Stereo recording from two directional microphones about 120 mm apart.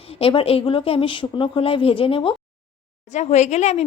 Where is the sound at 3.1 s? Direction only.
70° left (ahead or behind).